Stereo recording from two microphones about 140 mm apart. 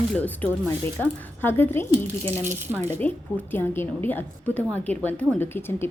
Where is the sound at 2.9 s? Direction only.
15° left (ahead or behind).